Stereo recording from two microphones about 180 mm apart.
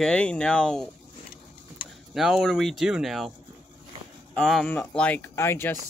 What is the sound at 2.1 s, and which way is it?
Speech, centre (ahead or behind).